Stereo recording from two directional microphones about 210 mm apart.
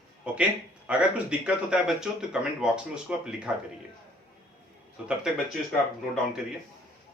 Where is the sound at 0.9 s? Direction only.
5° right (ahead or behind).